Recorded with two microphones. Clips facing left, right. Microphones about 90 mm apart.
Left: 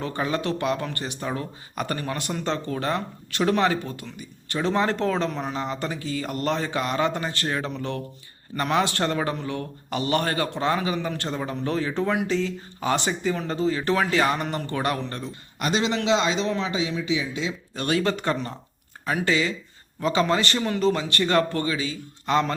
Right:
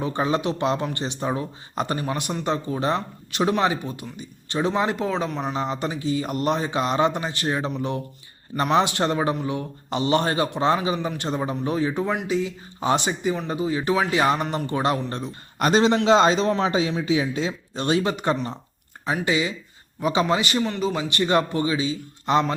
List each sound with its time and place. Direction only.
0.0 s speech: 20° right (ahead or behind); by 5.5 s 5° right (ahead or behind)
5.5 s speech: 20° right (ahead or behind)
15.5 s a man's voice: 45° right (ahead or behind)
17.7 s speech: 20° right (ahead or behind)